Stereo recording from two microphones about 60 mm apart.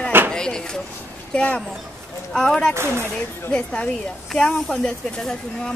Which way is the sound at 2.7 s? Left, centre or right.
Right.